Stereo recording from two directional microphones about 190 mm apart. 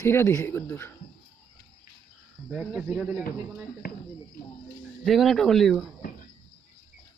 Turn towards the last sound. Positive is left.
turn(degrees=0)  # may be behind; listen again after turning